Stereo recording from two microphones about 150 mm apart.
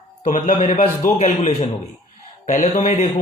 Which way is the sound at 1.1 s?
50° left (ahead or behind).